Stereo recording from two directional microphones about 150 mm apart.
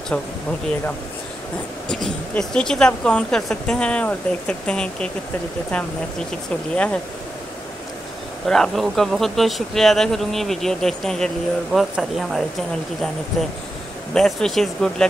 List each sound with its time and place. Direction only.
0.1 s speech: 10° left (ahead or behind)
1.9 s speech: 5° left (ahead or behind)
6.7 s speech: 5° left (ahead or behind)
8.5 s speech: centre (ahead or behind)
14.1 s speech: centre (ahead or behind)